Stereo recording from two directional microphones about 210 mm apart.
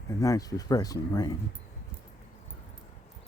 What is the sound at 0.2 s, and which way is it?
Speech, 15° left (ahead or behind).